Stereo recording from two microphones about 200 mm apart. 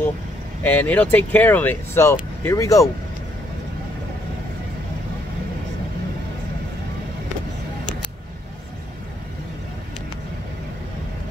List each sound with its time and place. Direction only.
0.6 s speech: 10° left (ahead or behind)